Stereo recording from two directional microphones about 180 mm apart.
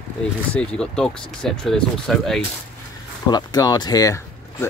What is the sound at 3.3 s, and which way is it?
Speech, 20° left (ahead or behind).